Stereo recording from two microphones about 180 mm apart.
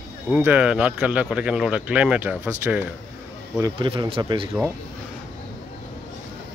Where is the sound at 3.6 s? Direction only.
25° right (ahead or behind).